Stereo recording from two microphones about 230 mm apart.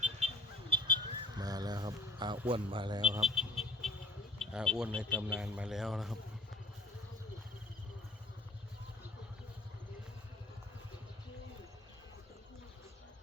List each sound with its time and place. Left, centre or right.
0.7 s vehicle: centre
2.5 s a man's voice: right
3.2 s vehicle: centre
4.4 s a man's voice: centre